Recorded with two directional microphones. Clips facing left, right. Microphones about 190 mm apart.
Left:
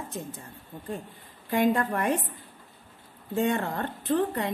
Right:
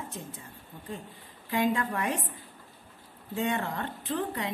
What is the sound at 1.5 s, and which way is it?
Speech, 45° left (ahead or behind).